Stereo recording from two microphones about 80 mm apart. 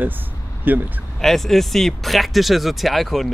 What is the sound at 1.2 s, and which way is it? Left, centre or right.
Speech, centre.